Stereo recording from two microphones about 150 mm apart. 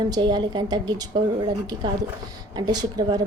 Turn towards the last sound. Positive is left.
turn(degrees=-30)  # may be behind; listen again after turning